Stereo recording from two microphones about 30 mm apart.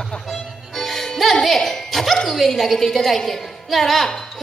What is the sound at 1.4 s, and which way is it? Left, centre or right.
A woman's voice, centre.